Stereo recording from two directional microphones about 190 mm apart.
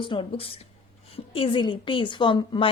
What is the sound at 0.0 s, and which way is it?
A woman's voice, 25° left (ahead or behind).